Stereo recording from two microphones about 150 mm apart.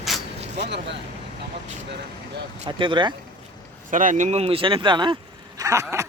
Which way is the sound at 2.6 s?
30° right (ahead or behind).